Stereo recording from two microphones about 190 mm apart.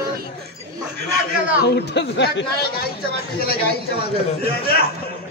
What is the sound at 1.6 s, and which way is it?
Speech, 65° left (ahead or behind).